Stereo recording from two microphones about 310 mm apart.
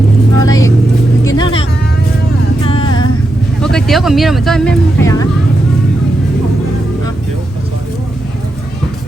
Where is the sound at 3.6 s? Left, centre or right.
Centre.